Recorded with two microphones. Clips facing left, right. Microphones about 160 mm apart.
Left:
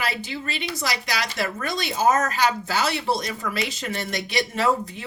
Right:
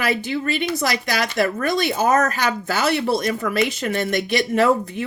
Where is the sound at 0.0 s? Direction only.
50° right (ahead or behind).